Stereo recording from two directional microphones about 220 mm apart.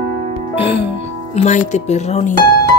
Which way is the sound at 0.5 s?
25° left (ahead or behind).